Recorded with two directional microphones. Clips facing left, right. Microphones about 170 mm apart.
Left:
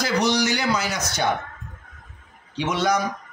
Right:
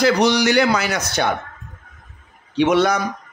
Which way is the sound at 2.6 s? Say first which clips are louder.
Right 7 dB; 60° right (ahead or behind).